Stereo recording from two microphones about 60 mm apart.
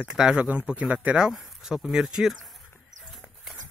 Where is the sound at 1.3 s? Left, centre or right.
Centre.